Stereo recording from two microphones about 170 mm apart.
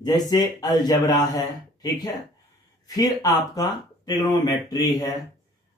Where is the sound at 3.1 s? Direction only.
20° left (ahead or behind).